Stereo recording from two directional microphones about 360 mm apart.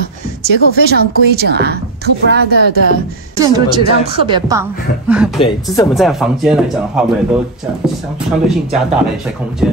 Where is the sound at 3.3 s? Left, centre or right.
Centre.